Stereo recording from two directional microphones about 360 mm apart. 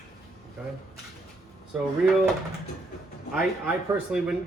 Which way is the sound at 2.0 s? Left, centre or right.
Centre.